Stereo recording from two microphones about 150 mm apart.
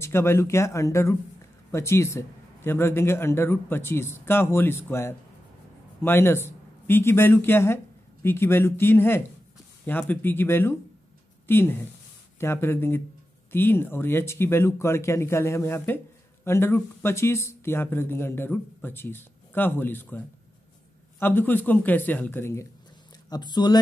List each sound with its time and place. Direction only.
0.0 s speech: 15° left (ahead or behind)
23.3 s speech: 30° left (ahead or behind)